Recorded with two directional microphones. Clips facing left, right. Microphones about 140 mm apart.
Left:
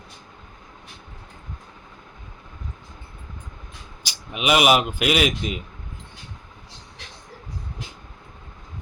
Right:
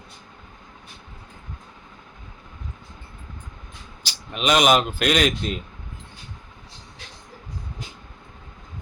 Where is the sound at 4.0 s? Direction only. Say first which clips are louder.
Right 1 dB; 10° left (ahead or behind).